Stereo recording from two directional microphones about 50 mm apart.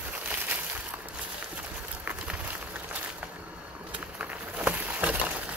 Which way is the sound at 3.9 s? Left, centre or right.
Right.